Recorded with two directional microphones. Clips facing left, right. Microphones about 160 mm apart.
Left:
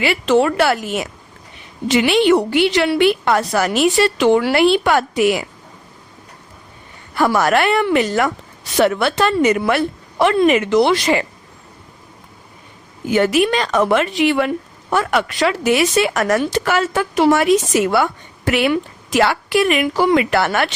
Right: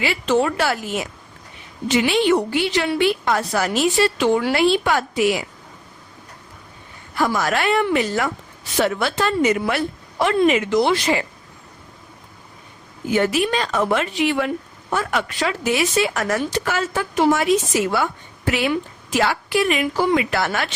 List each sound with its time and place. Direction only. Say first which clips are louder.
0.0 s speech: left 4 dB; 75° left (ahead or behind); by 5.5 s 60° left (ahead or behind)
7.2 s a woman's voice: left 5 dB; 65° left (ahead or behind)
13.1 s speech: left 4 dB; 70° left (ahead or behind)